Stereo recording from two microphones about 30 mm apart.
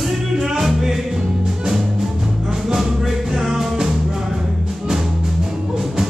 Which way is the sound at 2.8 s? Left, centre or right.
Centre.